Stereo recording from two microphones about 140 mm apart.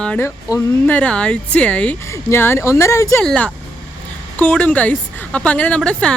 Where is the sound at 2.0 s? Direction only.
20° left (ahead or behind).